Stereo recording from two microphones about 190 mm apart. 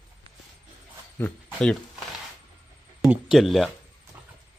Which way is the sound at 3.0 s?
Centre (ahead or behind).